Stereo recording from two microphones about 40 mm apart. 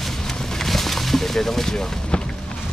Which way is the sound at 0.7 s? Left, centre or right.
Centre.